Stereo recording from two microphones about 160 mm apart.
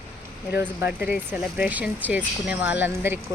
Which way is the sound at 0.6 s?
10° right (ahead or behind).